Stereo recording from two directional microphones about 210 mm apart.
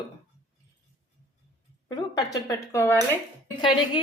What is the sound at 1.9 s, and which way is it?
A woman's voice, 20° left (ahead or behind).